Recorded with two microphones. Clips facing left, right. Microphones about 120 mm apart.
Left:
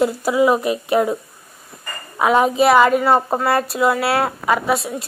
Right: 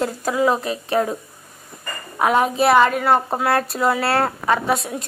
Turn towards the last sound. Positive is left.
turn(degrees=0)  # may be behind; listen again after turning